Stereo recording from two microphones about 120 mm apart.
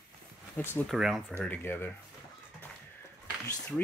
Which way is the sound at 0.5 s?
15° left (ahead or behind).